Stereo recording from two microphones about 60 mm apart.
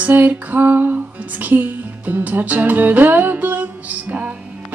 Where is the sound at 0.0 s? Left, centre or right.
Right.